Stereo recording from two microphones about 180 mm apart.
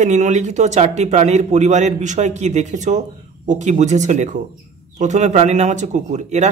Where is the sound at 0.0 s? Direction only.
40° right (ahead or behind).